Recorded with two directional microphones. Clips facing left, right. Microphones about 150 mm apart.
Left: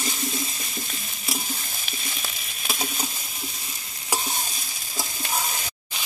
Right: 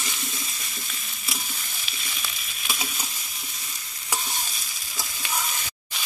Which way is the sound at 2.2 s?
40° left (ahead or behind).